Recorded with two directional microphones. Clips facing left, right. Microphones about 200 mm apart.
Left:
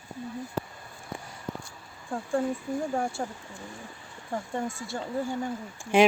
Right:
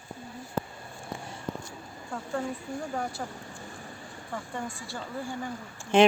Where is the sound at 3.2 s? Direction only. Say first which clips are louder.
Left 3 dB; 35° left (ahead or behind).